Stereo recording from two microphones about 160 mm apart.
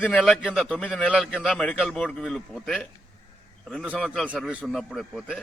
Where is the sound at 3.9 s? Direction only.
5° left (ahead or behind).